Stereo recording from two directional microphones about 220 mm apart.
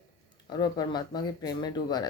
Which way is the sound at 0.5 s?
20° left (ahead or behind).